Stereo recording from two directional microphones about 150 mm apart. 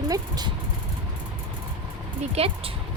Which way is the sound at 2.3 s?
40° right (ahead or behind).